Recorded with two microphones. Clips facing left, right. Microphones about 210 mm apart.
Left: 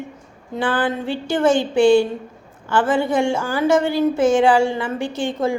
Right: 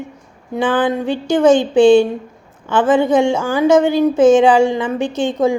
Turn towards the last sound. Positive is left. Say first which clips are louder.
# right 5 dB
turn(degrees=-20)  # may be behind; listen again after turning